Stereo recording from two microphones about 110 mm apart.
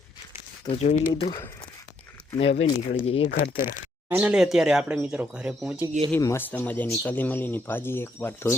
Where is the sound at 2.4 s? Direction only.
65° left (ahead or behind).